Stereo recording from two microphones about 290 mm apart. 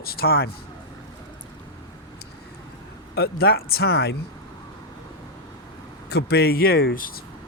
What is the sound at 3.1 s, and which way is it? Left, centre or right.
Speech, left.